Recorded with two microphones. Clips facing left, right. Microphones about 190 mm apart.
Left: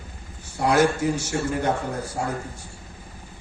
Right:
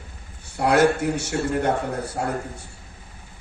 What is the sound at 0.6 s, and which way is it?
Speech, 60° right (ahead or behind).